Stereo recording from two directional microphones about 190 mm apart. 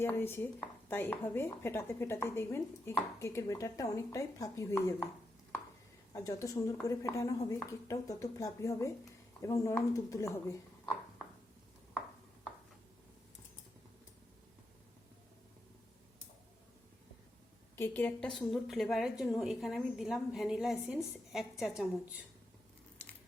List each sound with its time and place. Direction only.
0.0 s speech: 10° left (ahead or behind)
6.1 s speech: 15° left (ahead or behind)
17.7 s a woman's voice: 10° left (ahead or behind); by 22.2 s 5° right (ahead or behind)